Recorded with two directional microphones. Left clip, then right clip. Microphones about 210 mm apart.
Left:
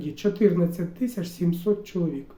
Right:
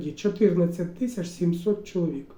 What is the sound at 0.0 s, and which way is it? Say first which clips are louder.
Speech: left 1 dB; 20° left (ahead or behind).